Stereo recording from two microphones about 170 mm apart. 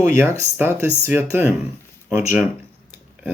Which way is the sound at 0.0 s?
10° right (ahead or behind).